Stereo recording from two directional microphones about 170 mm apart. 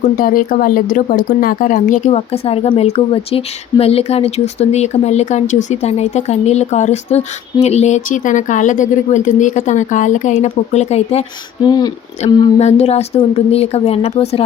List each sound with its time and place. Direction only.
0.0 s speech: 55° left (ahead or behind)
11.6 s a woman's voice: 25° left (ahead or behind)
12.5 s speech: 40° left (ahead or behind)